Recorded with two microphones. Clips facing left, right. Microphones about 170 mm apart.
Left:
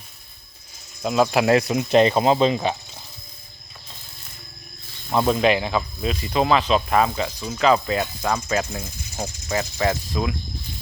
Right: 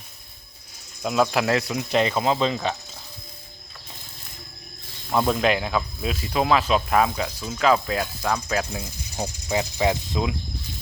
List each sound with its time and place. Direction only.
1.0 s speech: 5° left (ahead or behind)
1.7 s speech: 30° left (ahead or behind)
5.0 s speech: centre (ahead or behind)
8.7 s speech: 15° right (ahead or behind)